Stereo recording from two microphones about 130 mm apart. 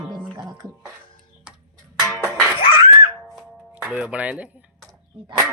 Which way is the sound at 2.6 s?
40° left (ahead or behind).